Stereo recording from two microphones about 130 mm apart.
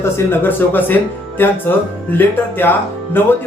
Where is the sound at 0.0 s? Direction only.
15° left (ahead or behind).